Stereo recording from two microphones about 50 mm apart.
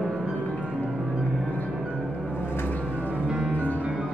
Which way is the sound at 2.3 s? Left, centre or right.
Left.